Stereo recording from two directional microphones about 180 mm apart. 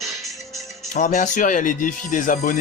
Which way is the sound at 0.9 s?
45° left (ahead or behind).